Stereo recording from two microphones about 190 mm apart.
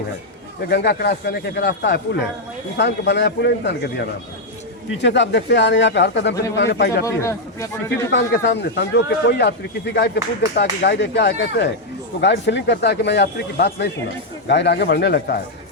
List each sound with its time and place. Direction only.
0.7 s speech: 60° left (ahead or behind)
4.9 s speech: 70° left (ahead or behind)
7.0 s speech: 15° left (ahead or behind)
8.1 s speech: 60° left (ahead or behind)